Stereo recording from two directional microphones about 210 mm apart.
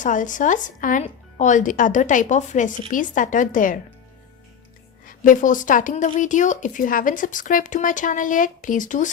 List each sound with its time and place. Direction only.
0.0 s speech: 35° left (ahead or behind)
5.0 s speech: 40° left (ahead or behind)